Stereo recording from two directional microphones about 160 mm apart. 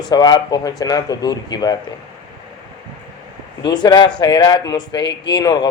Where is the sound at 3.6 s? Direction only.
25° left (ahead or behind).